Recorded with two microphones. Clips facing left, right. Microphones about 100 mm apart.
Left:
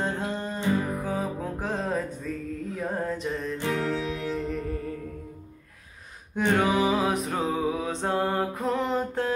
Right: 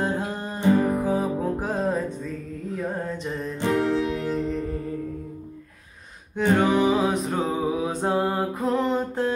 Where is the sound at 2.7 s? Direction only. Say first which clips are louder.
Right 1 dB; centre (ahead or behind).